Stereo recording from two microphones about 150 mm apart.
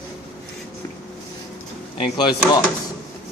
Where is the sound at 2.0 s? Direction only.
30° left (ahead or behind).